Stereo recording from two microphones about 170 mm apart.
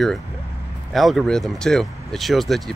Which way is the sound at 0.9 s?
Centre (ahead or behind).